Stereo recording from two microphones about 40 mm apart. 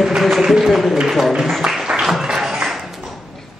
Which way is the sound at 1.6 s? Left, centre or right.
Centre.